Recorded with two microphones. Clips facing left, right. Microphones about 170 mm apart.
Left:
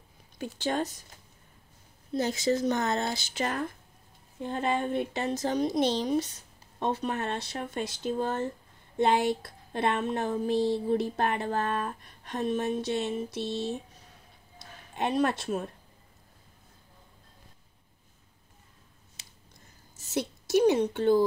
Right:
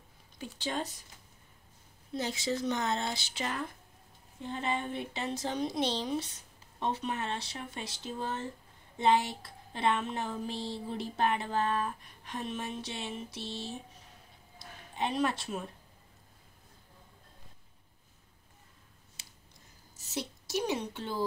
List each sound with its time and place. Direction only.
0.4 s a woman's voice: 50° left (ahead or behind)
2.1 s a woman's voice: 45° left (ahead or behind)
15.0 s a woman's voice: 50° left (ahead or behind)
20.2 s a woman's voice: 55° left (ahead or behind)